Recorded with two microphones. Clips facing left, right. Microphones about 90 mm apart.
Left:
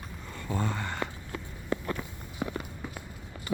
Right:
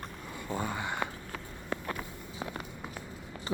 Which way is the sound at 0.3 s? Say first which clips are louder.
Left 2 dB; 10° right (ahead or behind).